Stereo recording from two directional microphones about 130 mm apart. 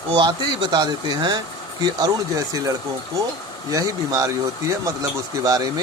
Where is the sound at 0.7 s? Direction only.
35° right (ahead or behind).